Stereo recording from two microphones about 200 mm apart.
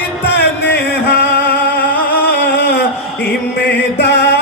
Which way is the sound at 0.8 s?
50° left (ahead or behind).